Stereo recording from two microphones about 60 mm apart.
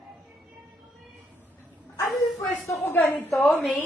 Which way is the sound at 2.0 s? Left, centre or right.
Centre.